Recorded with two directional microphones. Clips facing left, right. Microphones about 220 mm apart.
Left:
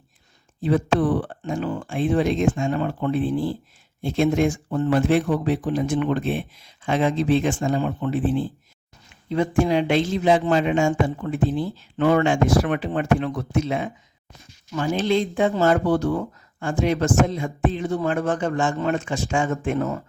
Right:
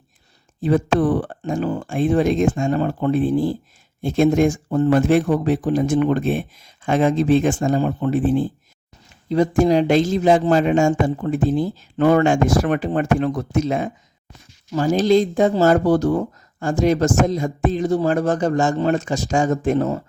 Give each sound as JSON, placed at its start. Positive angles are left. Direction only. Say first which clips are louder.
{"t": 0.6, "sound": "speech", "louder": "right 3 dB", "side_deg": -45}
{"t": 9.6, "sound": "speech", "louder": "right 4 dB", "side_deg": -40}